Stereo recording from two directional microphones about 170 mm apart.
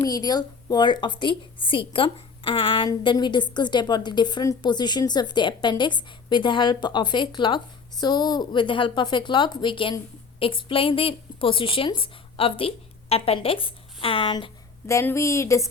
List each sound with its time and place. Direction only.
0.0 s a woman's voice: 25° left (ahead or behind)
14.8 s a woman's voice: 15° left (ahead or behind)